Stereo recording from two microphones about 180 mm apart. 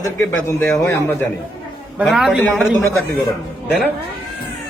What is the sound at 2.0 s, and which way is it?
Speech, centre (ahead or behind).